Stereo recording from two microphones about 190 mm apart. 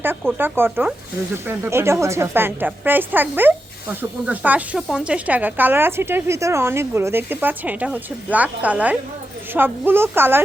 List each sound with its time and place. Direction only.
0.0 s a woman's voice: 10° right (ahead or behind)